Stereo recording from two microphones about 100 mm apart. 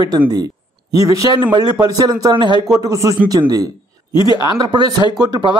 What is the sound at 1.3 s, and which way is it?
A man's voice, 45° right (ahead or behind).